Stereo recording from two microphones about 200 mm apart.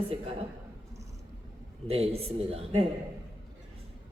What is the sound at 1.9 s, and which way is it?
Mantra, 30° right (ahead or behind).